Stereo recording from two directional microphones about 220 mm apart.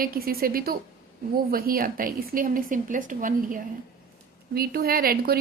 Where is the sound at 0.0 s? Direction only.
40° right (ahead or behind).